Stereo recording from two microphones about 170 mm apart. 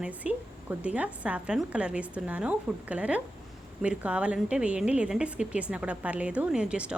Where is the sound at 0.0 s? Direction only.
10° right (ahead or behind).